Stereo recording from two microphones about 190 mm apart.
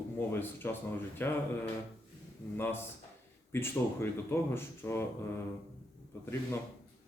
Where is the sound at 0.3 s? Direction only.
10° left (ahead or behind).